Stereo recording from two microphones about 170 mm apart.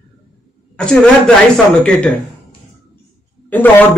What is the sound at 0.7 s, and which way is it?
Speech, 5° left (ahead or behind).